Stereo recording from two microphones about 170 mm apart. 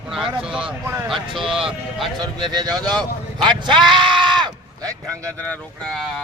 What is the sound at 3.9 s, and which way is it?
Sheep, 30° right (ahead or behind).